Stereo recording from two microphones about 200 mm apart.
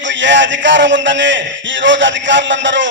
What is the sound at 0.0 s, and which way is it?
A man's voice, 65° right (ahead or behind).